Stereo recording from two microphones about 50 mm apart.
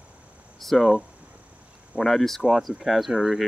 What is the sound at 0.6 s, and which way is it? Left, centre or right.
Speech, centre.